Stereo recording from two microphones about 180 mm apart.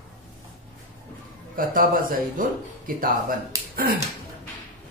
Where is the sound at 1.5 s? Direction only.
50° right (ahead or behind).